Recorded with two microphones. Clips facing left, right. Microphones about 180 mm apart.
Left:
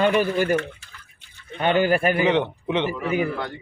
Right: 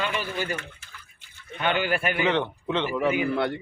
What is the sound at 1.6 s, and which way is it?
Speech, 40° left (ahead or behind).